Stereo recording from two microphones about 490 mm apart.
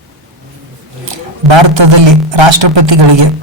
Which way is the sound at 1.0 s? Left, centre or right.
Right.